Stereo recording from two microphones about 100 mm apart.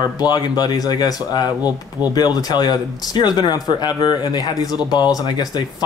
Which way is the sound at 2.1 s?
40° left (ahead or behind).